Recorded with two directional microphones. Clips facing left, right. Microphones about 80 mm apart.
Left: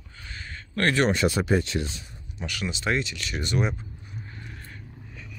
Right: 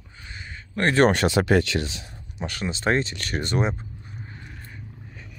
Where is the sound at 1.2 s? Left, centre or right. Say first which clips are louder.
Right 3 dB; right.